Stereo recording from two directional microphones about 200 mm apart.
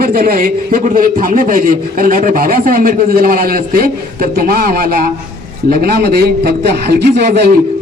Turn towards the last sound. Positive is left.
turn(degrees=-55)  # may be behind; listen again after turning